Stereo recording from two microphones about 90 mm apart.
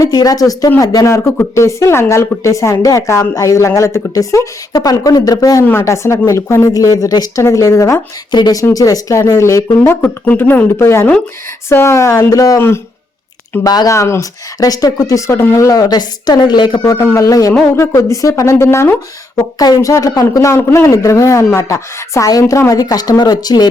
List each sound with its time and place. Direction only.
0.0 s speech: 45° left (ahead or behind)
5.6 s speech: 30° left (ahead or behind)
10.0 s a woman's voice: 20° left (ahead or behind); by 12.6 s 40° left (ahead or behind)
13.7 s speech: 45° left (ahead or behind)
13.9 s speech: 35° left (ahead or behind); by 16.8 s 50° left (ahead or behind)
16.8 s speech: 35° left (ahead or behind)
19.4 s speech: 40° left (ahead or behind)
20.6 s speech: 25° left (ahead or behind)
20.8 s speech: 35° left (ahead or behind)